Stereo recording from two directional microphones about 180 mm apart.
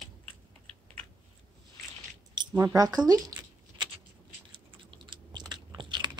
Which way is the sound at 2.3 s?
20° right (ahead or behind).